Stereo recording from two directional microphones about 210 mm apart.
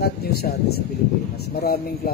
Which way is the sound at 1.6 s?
45° left (ahead or behind).